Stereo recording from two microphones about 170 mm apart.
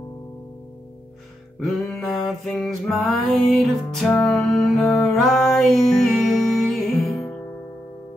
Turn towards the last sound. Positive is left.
turn(degrees=15)  # may be behind; listen again after turning